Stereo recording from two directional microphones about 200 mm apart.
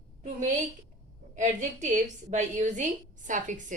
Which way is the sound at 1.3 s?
40° right (ahead or behind).